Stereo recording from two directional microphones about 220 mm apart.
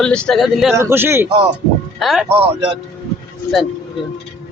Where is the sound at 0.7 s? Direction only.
10° right (ahead or behind).